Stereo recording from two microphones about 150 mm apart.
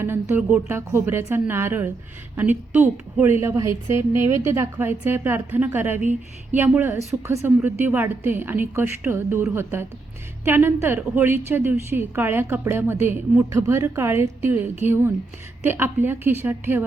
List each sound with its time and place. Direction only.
0.0 s a woman's voice: 15° right (ahead or behind)